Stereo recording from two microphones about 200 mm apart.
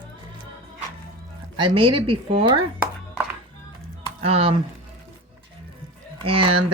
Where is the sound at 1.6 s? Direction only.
25° right (ahead or behind).